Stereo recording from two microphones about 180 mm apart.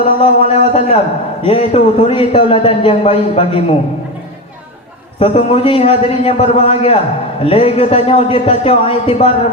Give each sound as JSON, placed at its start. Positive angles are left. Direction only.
{"t": 0.2, "sound": "a man's voice", "side_deg": 30}
{"t": 5.2, "sound": "a man's voice", "side_deg": 30}